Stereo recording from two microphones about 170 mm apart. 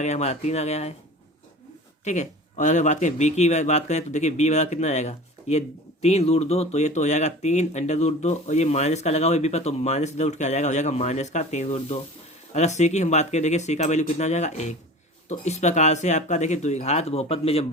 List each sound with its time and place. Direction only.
0.0 s speech: 40° left (ahead or behind)
2.0 s speech: 45° left (ahead or behind)